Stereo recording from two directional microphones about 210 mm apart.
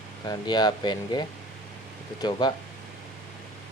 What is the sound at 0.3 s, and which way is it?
Speech, 20° left (ahead or behind).